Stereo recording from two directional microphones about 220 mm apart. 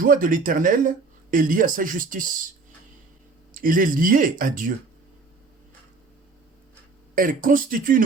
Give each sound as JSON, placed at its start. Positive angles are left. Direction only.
{"t": 0.0, "sound": "speech", "side_deg": -40}
{"t": 3.5, "sound": "speech", "side_deg": -40}
{"t": 7.2, "sound": "speech", "side_deg": -40}